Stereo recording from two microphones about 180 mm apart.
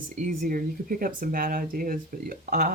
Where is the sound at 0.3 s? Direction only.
50° right (ahead or behind).